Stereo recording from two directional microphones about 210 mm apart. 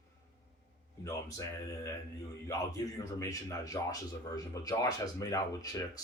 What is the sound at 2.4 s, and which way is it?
Speech, 15° left (ahead or behind).